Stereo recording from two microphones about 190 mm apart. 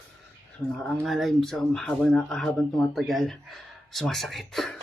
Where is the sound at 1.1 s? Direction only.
Centre (ahead or behind).